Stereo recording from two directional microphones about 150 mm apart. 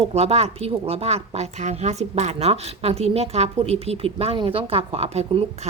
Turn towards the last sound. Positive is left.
turn(degrees=-45)  # may be behind; listen again after turning